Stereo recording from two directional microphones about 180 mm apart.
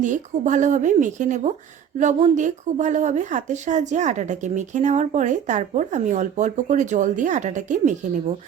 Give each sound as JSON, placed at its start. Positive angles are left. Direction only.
{"t": 0.0, "sound": "speech", "side_deg": -45}